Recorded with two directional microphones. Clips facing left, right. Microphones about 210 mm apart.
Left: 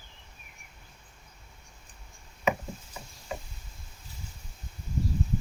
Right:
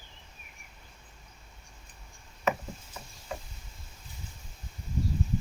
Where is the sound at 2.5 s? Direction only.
10° left (ahead or behind).